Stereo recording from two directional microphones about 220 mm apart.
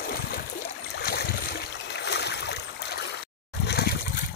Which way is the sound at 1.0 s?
45° left (ahead or behind).